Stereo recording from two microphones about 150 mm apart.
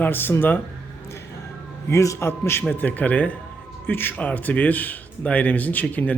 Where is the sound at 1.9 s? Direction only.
20° left (ahead or behind).